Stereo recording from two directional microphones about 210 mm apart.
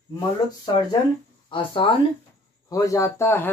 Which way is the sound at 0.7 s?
20° left (ahead or behind).